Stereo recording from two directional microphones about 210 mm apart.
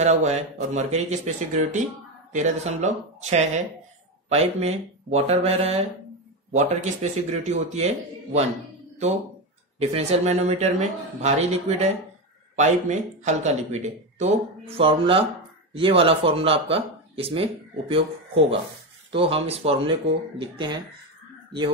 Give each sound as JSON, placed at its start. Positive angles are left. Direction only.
{"t": 0.0, "sound": "speech", "side_deg": -35}
{"t": 9.8, "sound": "speech", "side_deg": -30}